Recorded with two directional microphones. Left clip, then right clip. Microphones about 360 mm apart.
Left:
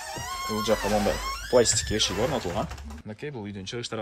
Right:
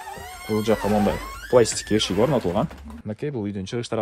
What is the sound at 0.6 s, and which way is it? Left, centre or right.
Speech, centre.